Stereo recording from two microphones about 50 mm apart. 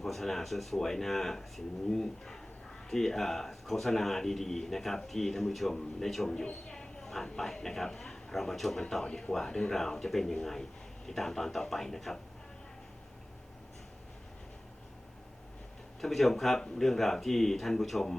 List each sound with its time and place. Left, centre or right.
0.0 s a man's voice: centre
6.2 s a man's voice: centre
16.0 s a man's voice: centre